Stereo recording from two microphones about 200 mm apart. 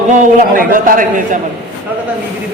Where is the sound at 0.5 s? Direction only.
45° right (ahead or behind).